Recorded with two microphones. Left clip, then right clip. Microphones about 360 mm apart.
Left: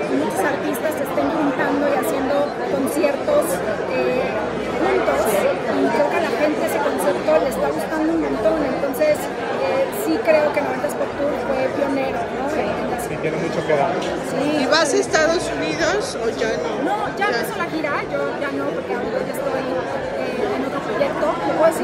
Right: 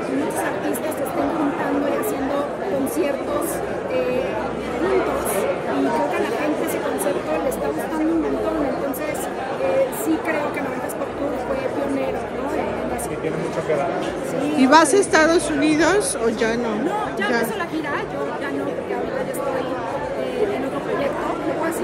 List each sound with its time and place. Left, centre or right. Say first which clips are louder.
14.6 s chatter: right 5 dB; centre